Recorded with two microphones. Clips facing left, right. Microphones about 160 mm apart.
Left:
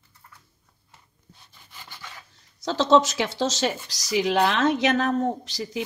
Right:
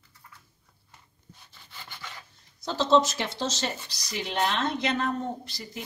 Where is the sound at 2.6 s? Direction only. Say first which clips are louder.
Left 3 dB; 90° left.